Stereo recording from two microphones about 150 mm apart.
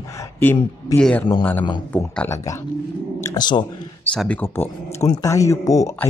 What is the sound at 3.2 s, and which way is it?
Speech, 25° left (ahead or behind).